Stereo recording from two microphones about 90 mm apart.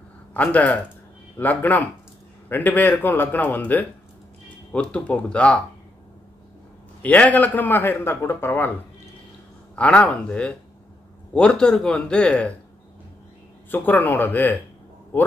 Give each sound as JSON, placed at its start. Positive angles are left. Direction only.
{"t": 0.3, "sound": "a man's voice", "side_deg": 15}
{"t": 7.0, "sound": "a man's voice", "side_deg": 15}
{"t": 9.8, "sound": "speech", "side_deg": 15}
{"t": 13.7, "sound": "a man's voice", "side_deg": 20}